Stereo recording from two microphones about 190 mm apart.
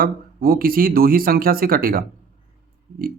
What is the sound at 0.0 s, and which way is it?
Speech, 50° right (ahead or behind).